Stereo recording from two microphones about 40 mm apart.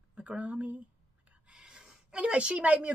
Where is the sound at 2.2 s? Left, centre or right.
Right.